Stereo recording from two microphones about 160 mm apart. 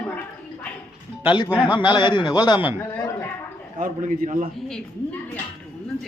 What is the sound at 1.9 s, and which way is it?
Speech, 30° left (ahead or behind).